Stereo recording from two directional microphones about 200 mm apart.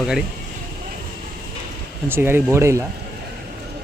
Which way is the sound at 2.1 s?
10° right (ahead or behind).